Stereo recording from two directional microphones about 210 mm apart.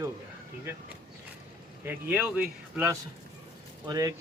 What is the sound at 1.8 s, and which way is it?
Speech, 10° right (ahead or behind).